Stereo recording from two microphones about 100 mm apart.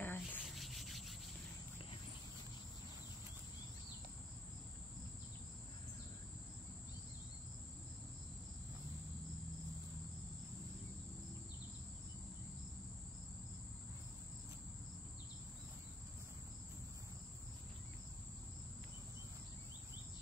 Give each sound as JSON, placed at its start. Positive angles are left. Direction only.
{"t": 0.0, "sound": "sanding", "side_deg": 20}
{"t": 0.5, "sound": "rub", "side_deg": 0}